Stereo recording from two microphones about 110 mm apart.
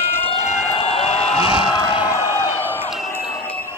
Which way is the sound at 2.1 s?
25° right (ahead or behind).